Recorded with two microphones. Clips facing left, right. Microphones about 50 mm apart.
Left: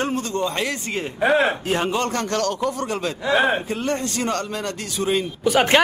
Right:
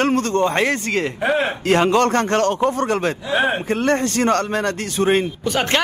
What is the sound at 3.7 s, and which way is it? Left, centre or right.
Speech, right.